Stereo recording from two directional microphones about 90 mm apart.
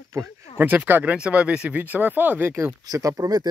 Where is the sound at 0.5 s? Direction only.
20° right (ahead or behind).